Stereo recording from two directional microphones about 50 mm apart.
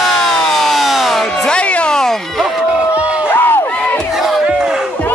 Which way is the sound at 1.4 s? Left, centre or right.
Left.